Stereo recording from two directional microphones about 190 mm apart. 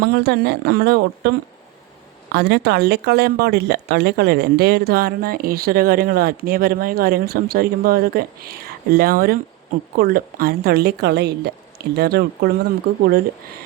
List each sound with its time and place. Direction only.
0.0 s a woman's voice: 55° right (ahead or behind)
2.3 s a woman's voice: 60° right (ahead or behind)